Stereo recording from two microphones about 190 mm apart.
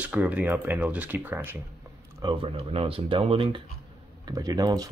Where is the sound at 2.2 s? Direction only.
25° right (ahead or behind).